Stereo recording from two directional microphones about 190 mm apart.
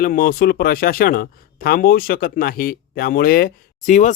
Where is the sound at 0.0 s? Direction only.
50° left (ahead or behind).